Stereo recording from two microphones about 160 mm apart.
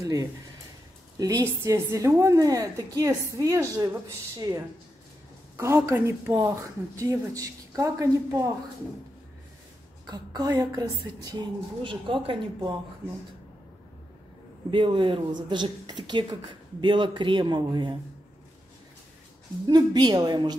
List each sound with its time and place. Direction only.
0.0 s a woman's voice: 20° right (ahead or behind)
10.0 s a woman's voice: 25° right (ahead or behind)
14.7 s a woman's voice: 30° right (ahead or behind)
19.7 s a woman's voice: 25° right (ahead or behind)